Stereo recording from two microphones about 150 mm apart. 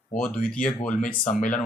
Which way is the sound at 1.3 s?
60° left (ahead or behind).